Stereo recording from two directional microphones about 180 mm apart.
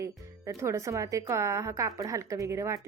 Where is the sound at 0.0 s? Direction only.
15° right (ahead or behind).